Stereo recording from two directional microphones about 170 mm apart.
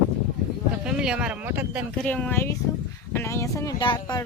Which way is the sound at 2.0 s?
10° left (ahead or behind).